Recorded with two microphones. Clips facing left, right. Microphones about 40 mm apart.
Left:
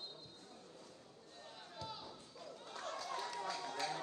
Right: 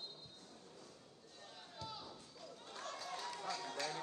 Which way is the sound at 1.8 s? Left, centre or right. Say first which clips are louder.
Left 1 dB; centre.